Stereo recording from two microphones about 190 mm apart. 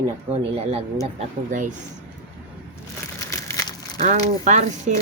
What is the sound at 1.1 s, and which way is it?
Speech, 40° right (ahead or behind).